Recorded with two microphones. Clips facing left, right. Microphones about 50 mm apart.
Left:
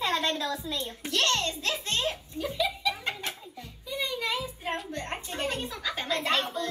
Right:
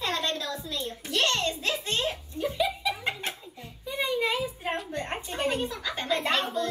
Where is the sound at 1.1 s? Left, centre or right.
Centre.